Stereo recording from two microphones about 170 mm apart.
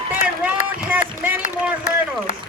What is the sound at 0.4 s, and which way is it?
Run, 10° right (ahead or behind).